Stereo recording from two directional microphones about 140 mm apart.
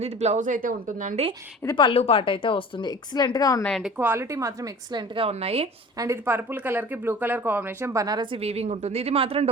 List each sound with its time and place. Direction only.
0.0 s a woman's voice: 50° right (ahead or behind)
1.6 s a woman's voice: 35° left (ahead or behind)
3.6 s speech: 5° left (ahead or behind)
3.8 s a woman's voice: 10° right (ahead or behind); by 5.6 s 45° right (ahead or behind)
6.0 s speech: 20° right (ahead or behind)
8.4 s speech: 45° right (ahead or behind)